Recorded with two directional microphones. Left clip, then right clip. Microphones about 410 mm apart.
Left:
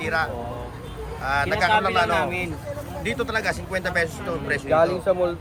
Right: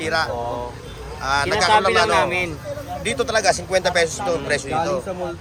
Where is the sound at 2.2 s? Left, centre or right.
Right.